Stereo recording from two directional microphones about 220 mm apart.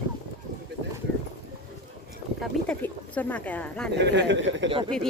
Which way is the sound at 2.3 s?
5° left (ahead or behind).